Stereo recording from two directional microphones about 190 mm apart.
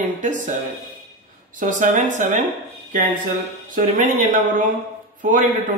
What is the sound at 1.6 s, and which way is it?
Speech, 45° right (ahead or behind).